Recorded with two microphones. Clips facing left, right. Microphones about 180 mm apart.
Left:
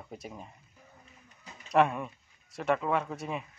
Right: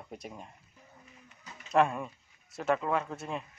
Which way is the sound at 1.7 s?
Centre (ahead or behind).